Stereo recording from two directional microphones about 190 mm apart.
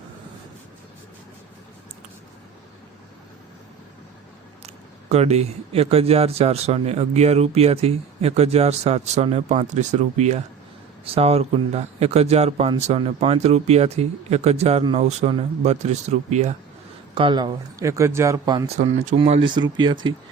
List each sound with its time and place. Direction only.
4.6 s speech: 35° right (ahead or behind)
17.2 s speech: 25° right (ahead or behind)
19.0 s speech: 35° right (ahead or behind)